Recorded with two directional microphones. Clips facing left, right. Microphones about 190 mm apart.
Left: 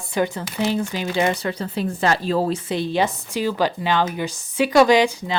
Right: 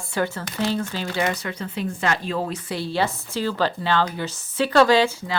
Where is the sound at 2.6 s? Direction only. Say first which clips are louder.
Left 3 dB; 20° left (ahead or behind).